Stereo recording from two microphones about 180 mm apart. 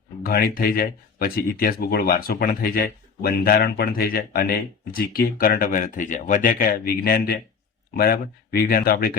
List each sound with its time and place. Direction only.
0.2 s speech: 55° left (ahead or behind)